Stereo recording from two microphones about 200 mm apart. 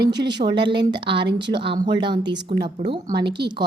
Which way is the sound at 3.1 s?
55° right (ahead or behind).